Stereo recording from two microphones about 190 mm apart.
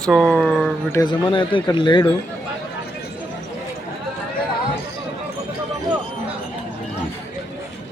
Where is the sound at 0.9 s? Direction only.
25° left (ahead or behind).